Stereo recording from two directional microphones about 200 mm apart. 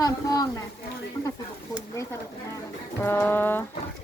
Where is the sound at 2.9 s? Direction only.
10° left (ahead or behind).